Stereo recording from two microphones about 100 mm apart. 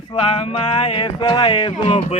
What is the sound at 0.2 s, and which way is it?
Speech, 65° left (ahead or behind).